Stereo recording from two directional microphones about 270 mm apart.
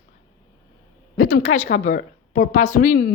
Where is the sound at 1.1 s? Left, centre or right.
Left.